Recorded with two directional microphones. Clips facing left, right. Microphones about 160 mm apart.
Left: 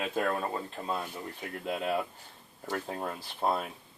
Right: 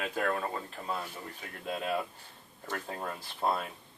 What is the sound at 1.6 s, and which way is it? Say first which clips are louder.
Speech: left 2 dB; 10° left (ahead or behind).